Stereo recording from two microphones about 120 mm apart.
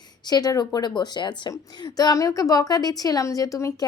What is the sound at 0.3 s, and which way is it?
A woman's voice, 35° left (ahead or behind).